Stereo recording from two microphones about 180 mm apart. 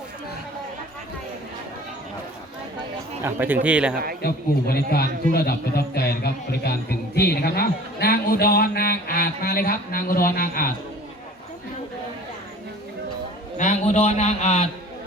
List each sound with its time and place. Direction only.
3.2 s a man's voice: 10° right (ahead or behind)
3.9 s a man's voice: 55° right (ahead or behind)
4.2 s a man's voice: 60° left (ahead or behind)
13.6 s a man's voice: 40° left (ahead or behind)